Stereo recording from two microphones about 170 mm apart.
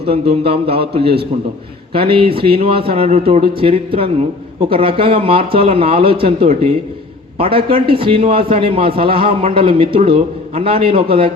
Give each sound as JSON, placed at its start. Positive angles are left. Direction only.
{"t": 0.1, "sound": "a man's voice", "side_deg": -35}
{"t": 1.9, "sound": "a man's voice", "side_deg": -30}